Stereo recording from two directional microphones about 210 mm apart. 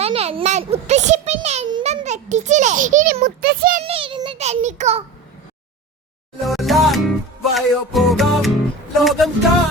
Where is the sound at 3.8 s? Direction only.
25° right (ahead or behind).